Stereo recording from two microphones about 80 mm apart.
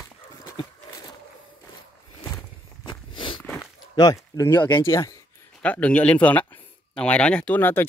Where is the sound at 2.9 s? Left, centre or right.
Left.